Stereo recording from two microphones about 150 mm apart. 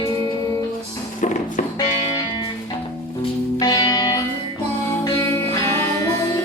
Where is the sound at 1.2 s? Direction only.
55° left (ahead or behind).